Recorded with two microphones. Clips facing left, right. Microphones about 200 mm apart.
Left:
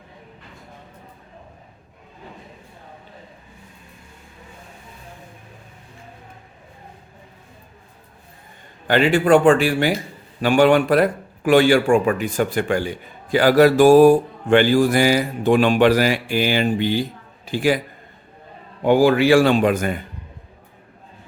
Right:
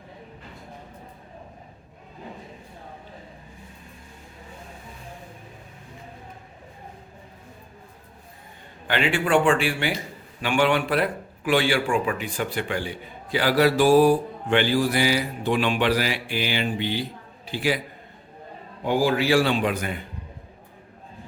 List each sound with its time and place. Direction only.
8.9 s a man's voice: 40° left (ahead or behind)
18.8 s speech: 65° left (ahead or behind); by 20.0 s 45° left (ahead or behind)